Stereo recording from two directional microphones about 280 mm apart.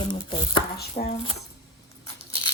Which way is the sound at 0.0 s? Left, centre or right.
Centre.